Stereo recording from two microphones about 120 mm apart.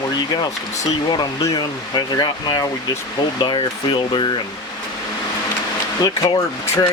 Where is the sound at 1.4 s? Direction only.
35° left (ahead or behind).